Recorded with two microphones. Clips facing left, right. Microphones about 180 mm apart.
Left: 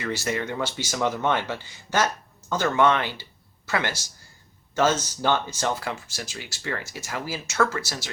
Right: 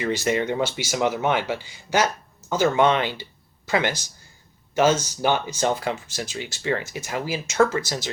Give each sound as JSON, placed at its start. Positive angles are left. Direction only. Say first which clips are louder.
{"t": 0.0, "sound": "speech", "louder": "right 5 dB", "side_deg": -20}
{"t": 0.8, "sound": "speech", "louder": "right 3 dB", "side_deg": -10}